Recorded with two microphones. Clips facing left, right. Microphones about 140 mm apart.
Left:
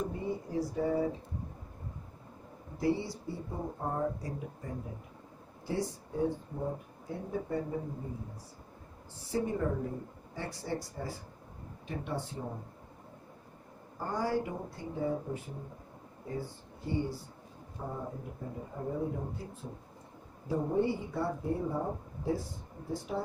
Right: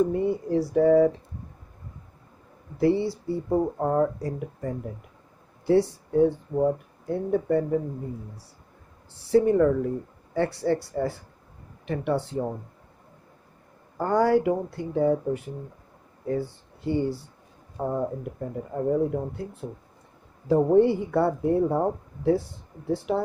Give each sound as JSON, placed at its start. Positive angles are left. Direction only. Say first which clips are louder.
{"t": 0.1, "sound": "speech", "louder": "right 11 dB", "side_deg": -70}
{"t": 2.7, "sound": "speech", "louder": "right 9 dB", "side_deg": -65}
{"t": 9.1, "sound": "speech", "louder": "right 14 dB", "side_deg": -70}
{"t": 14.0, "sound": "speech", "louder": "right 12 dB", "side_deg": -70}
{"t": 20.5, "sound": "speech", "louder": "right 11 dB", "side_deg": -75}